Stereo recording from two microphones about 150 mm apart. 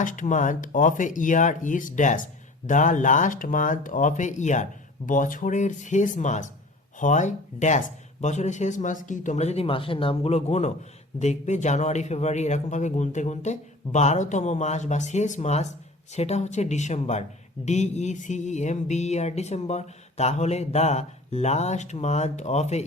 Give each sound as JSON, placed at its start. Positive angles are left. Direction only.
{"t": 0.0, "sound": "speech", "side_deg": 60}
{"t": 8.2, "sound": "music", "side_deg": 50}